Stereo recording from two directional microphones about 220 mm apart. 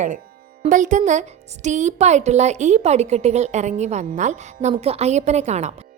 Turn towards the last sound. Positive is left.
turn(degrees=-30)  # may be behind; listen again after turning